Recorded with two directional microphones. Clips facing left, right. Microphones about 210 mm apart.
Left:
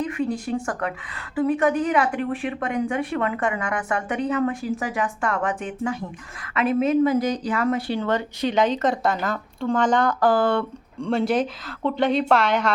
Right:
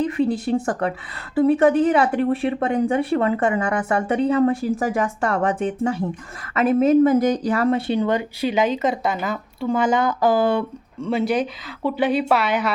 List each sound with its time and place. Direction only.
0.0 s speech: 35° right (ahead or behind); by 12.7 s 5° right (ahead or behind)